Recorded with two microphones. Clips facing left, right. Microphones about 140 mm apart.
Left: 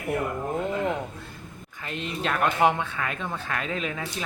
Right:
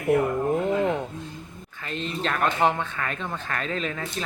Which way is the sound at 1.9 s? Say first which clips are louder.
Right 1 dB; 10° left (ahead or behind).